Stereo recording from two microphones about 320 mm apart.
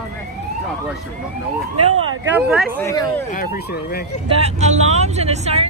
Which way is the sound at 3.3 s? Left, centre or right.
Left.